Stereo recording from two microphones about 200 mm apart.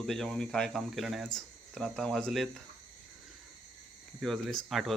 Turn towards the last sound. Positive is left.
turn(degrees=0)  # may be behind; listen again after turning